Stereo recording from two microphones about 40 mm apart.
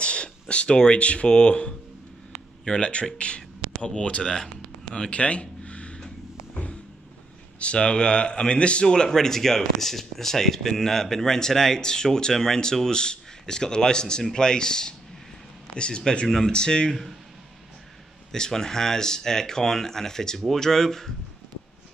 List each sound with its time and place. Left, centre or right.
0.0 s speech: left
4.2 s speech: centre
5.1 s a sound: left
7.5 s speech: left
16.3 s speech: centre
16.5 s speech: centre
18.3 s speech: centre